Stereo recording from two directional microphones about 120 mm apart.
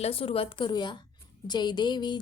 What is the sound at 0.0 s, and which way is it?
Speech, 50° left (ahead or behind).